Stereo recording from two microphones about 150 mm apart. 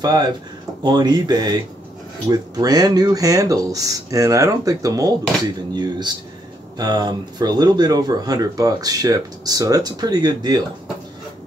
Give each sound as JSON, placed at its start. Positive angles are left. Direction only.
{"t": 0.0, "sound": "speech", "side_deg": -25}